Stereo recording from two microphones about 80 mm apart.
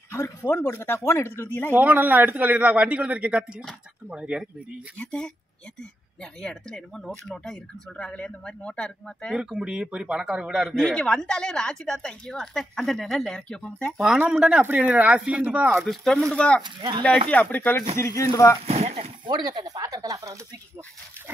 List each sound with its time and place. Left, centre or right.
0.1 s speech: left
1.8 s a man's voice: right
4.9 s speech: centre
6.4 s speech: centre
9.3 s a man's voice: centre
10.7 s speech: centre
13.9 s speech: centre
14.6 s a man's voice: right
15.8 s speech: centre
16.6 s speech: right
17.0 s speech: centre
17.7 s speech: left
19.2 s speech: right